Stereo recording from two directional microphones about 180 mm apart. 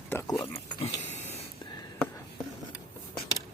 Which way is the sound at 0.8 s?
35° left (ahead or behind).